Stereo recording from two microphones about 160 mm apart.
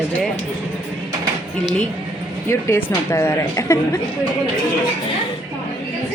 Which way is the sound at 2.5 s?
15° left (ahead or behind).